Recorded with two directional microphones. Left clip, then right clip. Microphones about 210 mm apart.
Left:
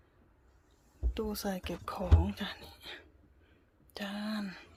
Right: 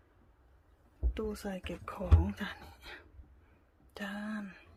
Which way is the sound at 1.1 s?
10° left (ahead or behind).